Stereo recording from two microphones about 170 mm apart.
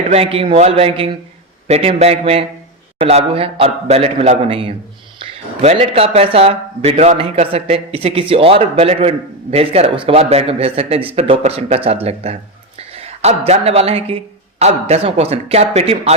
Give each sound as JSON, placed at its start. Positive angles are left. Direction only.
{"t": 0.1, "sound": "a man's voice", "side_deg": -35}